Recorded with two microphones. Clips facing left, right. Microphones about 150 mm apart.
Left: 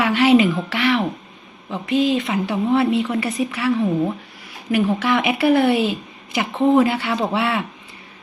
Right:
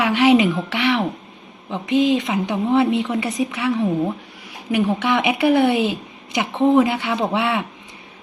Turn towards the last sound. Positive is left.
turn(degrees=-20)  # may be behind; listen again after turning